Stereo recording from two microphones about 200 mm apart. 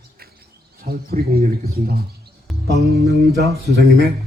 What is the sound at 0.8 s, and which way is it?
Speech, 50° right (ahead or behind).